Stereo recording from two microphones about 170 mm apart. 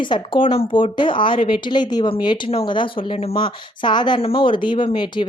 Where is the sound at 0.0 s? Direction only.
30° left (ahead or behind).